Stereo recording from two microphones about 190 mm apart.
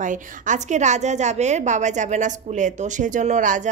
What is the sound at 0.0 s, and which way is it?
A woman's voice, 40° right (ahead or behind).